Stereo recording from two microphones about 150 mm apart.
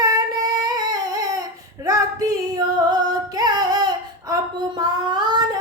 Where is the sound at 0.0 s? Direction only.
25° right (ahead or behind).